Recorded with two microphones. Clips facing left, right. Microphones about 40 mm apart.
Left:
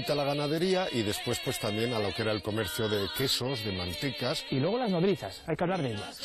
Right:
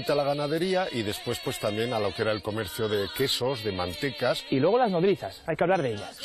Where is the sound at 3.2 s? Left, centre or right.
Right.